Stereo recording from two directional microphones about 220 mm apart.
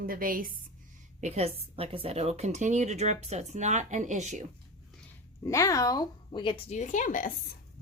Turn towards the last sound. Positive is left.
turn(degrees=35)  # may be behind; listen again after turning